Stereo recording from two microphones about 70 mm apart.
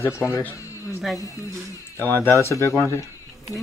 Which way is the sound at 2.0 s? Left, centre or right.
Left.